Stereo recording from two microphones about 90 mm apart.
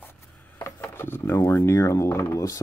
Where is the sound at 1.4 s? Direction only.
35° left (ahead or behind).